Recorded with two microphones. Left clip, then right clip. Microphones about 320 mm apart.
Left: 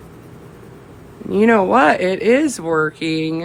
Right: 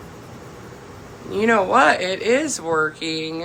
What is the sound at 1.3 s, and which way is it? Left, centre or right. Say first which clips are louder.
Speech: left 3 dB; left.